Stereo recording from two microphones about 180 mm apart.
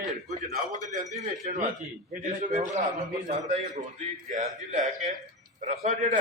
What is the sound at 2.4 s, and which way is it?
Speech, 45° right (ahead or behind).